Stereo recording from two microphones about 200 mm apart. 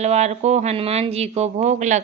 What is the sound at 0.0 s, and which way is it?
Speech, 35° right (ahead or behind).